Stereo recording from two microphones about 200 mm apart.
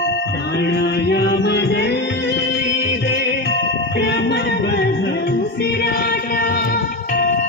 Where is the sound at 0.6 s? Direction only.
55° left (ahead or behind).